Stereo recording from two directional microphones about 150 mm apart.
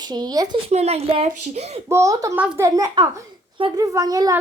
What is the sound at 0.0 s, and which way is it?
Speech, 25° right (ahead or behind).